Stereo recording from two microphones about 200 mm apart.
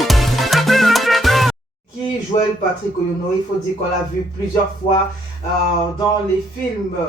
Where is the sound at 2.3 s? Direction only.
30° left (ahead or behind).